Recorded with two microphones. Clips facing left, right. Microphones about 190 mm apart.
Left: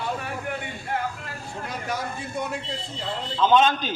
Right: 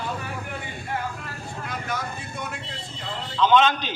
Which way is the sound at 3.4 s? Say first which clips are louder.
Even; 45° left (ahead or behind).